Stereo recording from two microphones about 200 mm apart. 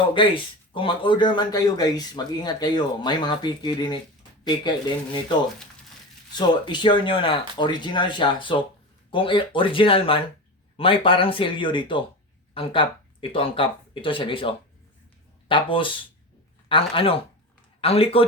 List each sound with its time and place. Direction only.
0.1 s a man's voice: 25° left (ahead or behind)
6.3 s a man's voice: 20° left (ahead or behind)